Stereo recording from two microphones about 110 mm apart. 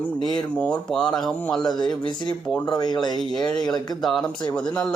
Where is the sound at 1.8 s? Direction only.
40° left (ahead or behind).